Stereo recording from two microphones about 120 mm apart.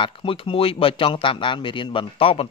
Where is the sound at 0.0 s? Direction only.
50° left (ahead or behind).